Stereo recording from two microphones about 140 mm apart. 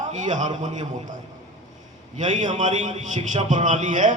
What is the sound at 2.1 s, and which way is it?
A man's voice, 60° right (ahead or behind).